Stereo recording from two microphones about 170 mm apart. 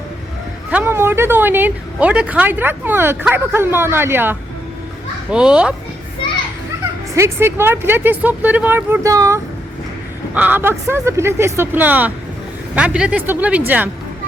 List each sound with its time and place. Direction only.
0.7 s a woman's voice: 10° right (ahead or behind)
7.2 s a woman's voice: 15° right (ahead or behind)